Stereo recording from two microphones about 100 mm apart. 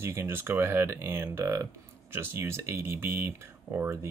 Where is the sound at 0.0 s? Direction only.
25° right (ahead or behind).